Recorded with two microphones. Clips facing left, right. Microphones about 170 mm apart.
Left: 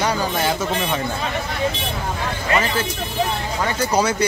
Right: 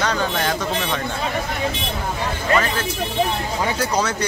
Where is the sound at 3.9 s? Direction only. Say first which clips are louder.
Left 3 dB; 10° left (ahead or behind).